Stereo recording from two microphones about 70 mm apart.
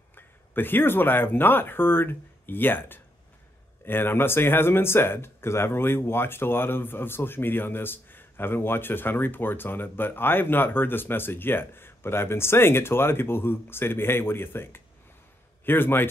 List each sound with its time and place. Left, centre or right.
0.1 s speech: left